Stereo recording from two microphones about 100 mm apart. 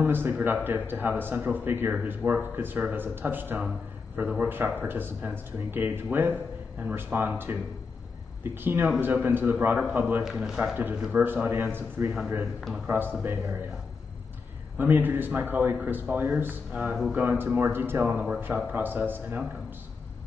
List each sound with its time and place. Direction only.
0.0 s speech: 20° right (ahead or behind)
8.5 s speech: 20° right (ahead or behind)
10.2 s a man's voice: 5° right (ahead or behind)
11.2 s speech: 20° right (ahead or behind)
12.5 s a man's voice: centre (ahead or behind)
12.8 s speech: 20° right (ahead or behind)
14.8 s speech: 20° right (ahead or behind)